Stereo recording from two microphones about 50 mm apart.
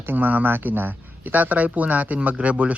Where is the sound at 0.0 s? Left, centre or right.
Right.